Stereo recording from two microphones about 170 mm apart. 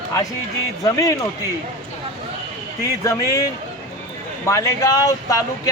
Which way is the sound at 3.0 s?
20° left (ahead or behind).